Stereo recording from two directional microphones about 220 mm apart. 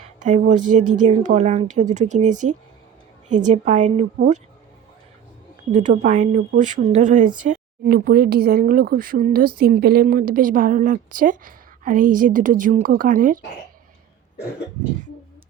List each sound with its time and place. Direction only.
0.2 s a woman's voice: 35° right (ahead or behind)
5.7 s a woman's voice: 35° right (ahead or behind)